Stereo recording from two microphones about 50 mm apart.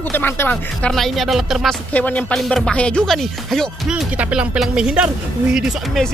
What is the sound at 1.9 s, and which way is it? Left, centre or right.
Speech, left.